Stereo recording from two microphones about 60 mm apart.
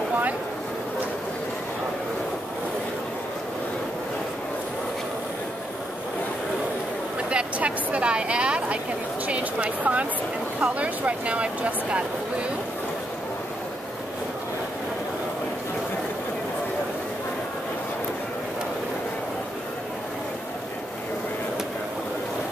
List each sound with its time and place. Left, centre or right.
7.2 s speech: centre